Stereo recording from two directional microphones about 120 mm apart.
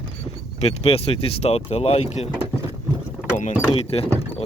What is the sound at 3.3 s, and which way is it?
Speech, 70° left (ahead or behind).